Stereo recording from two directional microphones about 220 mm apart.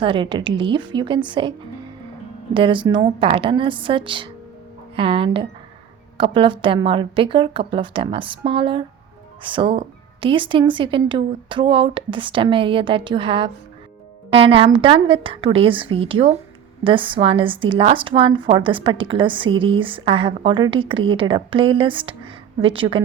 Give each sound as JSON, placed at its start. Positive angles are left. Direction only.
{"t": 0.0, "sound": "a woman's voice", "side_deg": -25}